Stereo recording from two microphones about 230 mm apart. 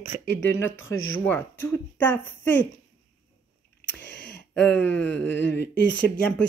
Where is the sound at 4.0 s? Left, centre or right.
Left.